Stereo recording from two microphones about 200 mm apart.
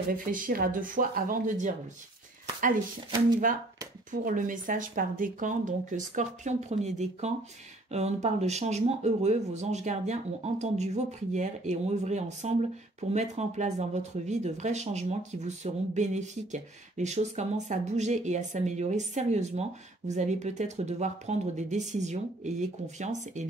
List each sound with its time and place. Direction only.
0.1 s speech: 45° right (ahead or behind)
4.1 s speech: 40° right (ahead or behind)